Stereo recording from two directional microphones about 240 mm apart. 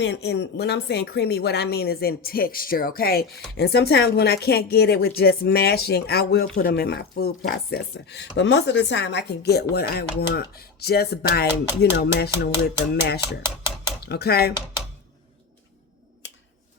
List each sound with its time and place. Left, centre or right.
0.0 s speech: left